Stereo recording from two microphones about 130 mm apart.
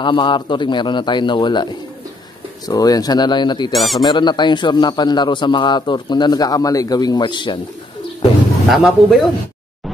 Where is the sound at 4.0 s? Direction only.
30° left (ahead or behind).